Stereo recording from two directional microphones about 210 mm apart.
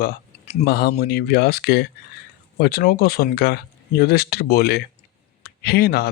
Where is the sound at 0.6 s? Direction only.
50° left (ahead or behind).